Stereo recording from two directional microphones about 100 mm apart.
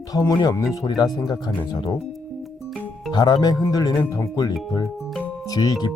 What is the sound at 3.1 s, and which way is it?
Speech, 45° left (ahead or behind).